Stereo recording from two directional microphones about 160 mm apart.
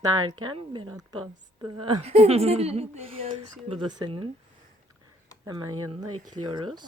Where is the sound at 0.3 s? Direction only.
30° right (ahead or behind).